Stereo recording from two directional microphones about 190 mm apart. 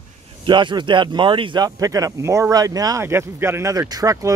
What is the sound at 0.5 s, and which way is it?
Speech, 25° right (ahead or behind).